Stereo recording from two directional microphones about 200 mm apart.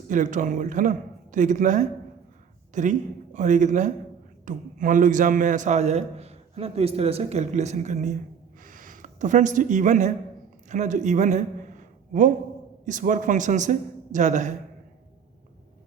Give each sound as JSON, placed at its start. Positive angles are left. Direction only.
{"t": 0.1, "sound": "a man's voice", "side_deg": -40}
{"t": 8.6, "sound": "a sound", "side_deg": -40}
{"t": 10.7, "sound": "a man's voice", "side_deg": -35}